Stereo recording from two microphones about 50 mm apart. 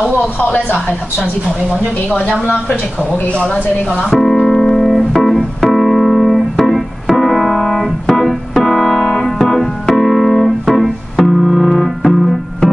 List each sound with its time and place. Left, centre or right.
2.4 s speech: left
4.1 s music: centre
4.9 s keyboard: centre